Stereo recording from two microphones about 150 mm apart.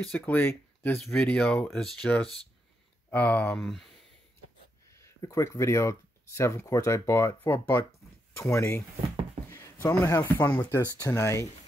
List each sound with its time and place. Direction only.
0.1 s speech: 10° left (ahead or behind)
4.9 s speech: 20° left (ahead or behind)